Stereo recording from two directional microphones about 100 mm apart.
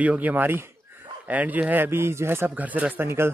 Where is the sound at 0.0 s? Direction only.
15° right (ahead or behind).